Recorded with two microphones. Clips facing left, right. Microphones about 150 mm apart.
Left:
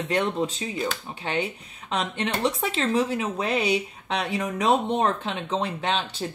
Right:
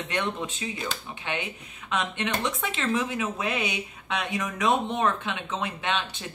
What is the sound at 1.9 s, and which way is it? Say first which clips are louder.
Speech: left 1 dB; 35° left (ahead or behind).